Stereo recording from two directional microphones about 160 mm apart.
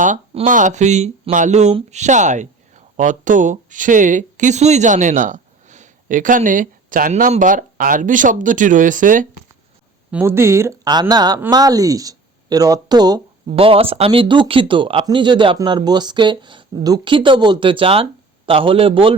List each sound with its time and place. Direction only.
0.4 s speech: 55° right (ahead or behind)
10.1 s speech: 10° right (ahead or behind)
13.6 s speech: 35° right (ahead or behind)